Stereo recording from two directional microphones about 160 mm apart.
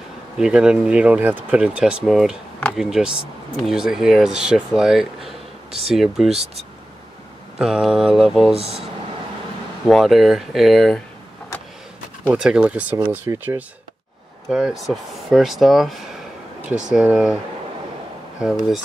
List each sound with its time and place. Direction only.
0.4 s speech: 5° right (ahead or behind)
7.5 s speech: 5° right (ahead or behind)
8.5 s speech: 40° right (ahead or behind)
9.8 s speech: centre (ahead or behind)
12.3 s speech: 5° right (ahead or behind)
14.5 s speech: 5° right (ahead or behind)